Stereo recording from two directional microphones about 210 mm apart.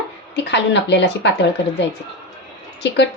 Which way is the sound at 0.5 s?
55° left (ahead or behind).